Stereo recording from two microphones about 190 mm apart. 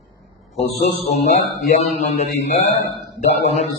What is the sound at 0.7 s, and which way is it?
A man's voice, 35° left (ahead or behind).